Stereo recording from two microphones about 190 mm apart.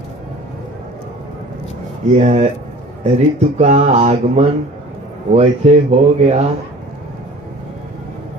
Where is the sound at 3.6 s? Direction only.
40° right (ahead or behind).